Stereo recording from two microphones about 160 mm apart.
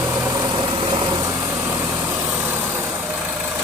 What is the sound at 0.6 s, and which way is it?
Vehicle, 30° right (ahead or behind).